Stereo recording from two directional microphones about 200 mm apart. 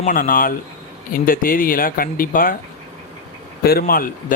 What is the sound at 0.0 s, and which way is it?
Speech, 45° left (ahead or behind).